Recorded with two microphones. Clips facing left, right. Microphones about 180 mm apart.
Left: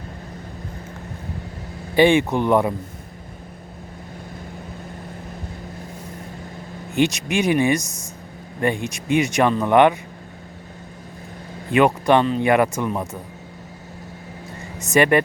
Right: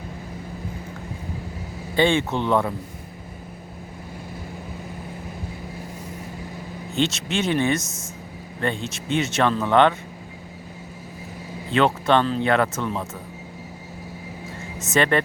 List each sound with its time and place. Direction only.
2.0 s speech: 15° left (ahead or behind)
6.9 s speech: 15° left (ahead or behind)
11.7 s speech: 15° left (ahead or behind)
14.9 s speech: 15° left (ahead or behind)